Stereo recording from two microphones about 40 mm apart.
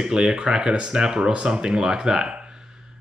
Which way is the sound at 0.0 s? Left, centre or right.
Right.